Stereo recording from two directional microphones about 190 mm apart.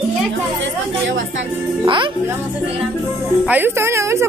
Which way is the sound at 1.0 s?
75° right (ahead or behind).